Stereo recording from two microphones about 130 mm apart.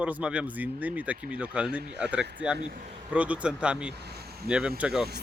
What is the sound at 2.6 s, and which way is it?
Speech, 75° right (ahead or behind).